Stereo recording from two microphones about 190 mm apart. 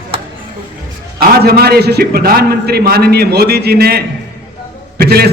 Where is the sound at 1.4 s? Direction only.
55° right (ahead or behind).